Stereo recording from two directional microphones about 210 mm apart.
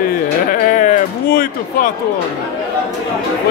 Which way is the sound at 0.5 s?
40° left (ahead or behind).